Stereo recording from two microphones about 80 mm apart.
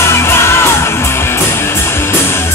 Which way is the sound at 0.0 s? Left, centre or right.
Left.